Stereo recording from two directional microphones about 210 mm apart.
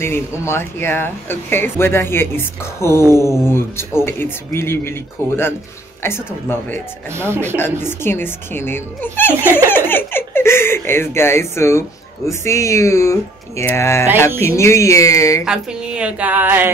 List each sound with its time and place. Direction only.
0.0 s speech: 10° left (ahead or behind)
7.1 s a woman's voice: 10° right (ahead or behind)
7.5 s speech: 10° left (ahead or behind)
15.4 s a woman's voice: 5° right (ahead or behind)